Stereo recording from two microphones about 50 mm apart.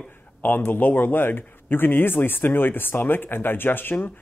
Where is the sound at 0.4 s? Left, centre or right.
Left.